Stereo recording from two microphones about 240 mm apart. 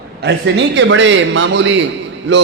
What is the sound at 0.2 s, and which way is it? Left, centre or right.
A man's voice, right.